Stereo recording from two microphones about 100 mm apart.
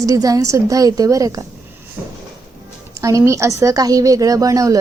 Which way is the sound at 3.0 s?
35° right (ahead or behind).